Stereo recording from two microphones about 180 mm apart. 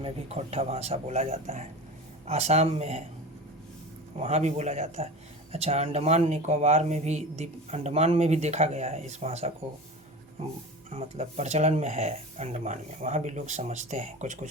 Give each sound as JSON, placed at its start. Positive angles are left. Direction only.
{"t": 0.0, "sound": "speech", "side_deg": -35}
{"t": 4.2, "sound": "speech", "side_deg": -35}
{"t": 10.9, "sound": "speech", "side_deg": -35}